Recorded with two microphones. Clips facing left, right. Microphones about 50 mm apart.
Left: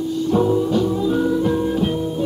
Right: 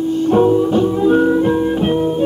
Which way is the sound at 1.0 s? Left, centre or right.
Right.